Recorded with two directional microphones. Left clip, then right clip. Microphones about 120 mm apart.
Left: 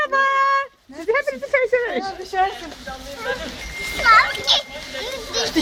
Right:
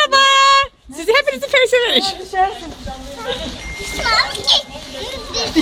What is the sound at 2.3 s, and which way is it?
Speech, 30° left (ahead or behind).